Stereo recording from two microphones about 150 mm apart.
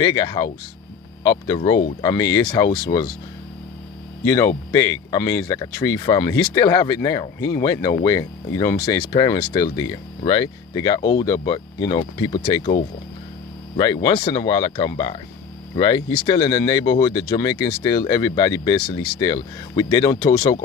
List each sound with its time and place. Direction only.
0.0 s speech: 30° left (ahead or behind)
4.2 s speech: 20° left (ahead or behind)
13.7 s speech: 30° left (ahead or behind)